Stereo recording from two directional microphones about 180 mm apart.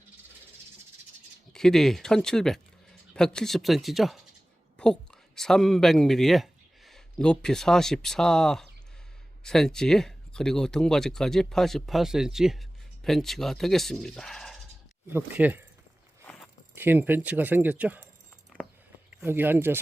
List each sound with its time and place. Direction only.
1.5 s speech: 5° left (ahead or behind)
15.1 s speech: 10° right (ahead or behind)
16.7 s speech: 10° right (ahead or behind)
19.2 s speech: 10° right (ahead or behind)